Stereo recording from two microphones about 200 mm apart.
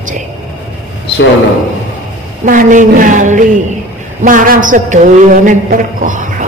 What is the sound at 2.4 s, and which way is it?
Speech, 40° right (ahead or behind).